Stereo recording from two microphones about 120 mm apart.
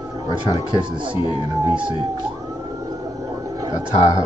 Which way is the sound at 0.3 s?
40° right (ahead or behind).